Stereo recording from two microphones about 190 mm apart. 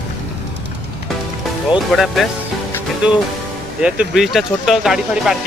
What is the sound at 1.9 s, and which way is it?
Speech, centre (ahead or behind).